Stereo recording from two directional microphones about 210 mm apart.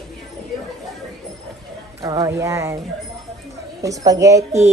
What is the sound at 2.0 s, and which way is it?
Speech, 15° right (ahead or behind).